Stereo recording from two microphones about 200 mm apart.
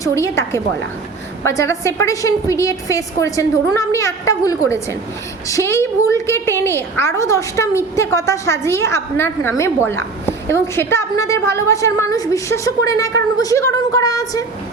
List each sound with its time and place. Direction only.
0.0 s a woman's voice: 15° left (ahead or behind)